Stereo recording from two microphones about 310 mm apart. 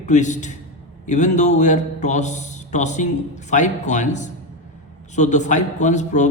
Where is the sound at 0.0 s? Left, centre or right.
Left.